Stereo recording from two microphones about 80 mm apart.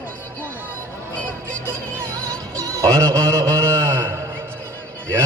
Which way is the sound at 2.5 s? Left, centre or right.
Right.